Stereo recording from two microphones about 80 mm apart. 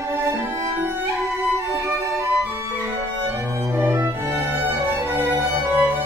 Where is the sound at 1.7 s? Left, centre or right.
Right.